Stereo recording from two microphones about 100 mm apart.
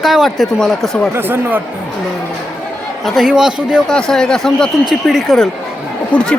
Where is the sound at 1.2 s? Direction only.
20° right (ahead or behind).